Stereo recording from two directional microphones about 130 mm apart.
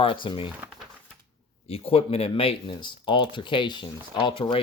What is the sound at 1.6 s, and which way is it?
Speech, 50° left (ahead or behind).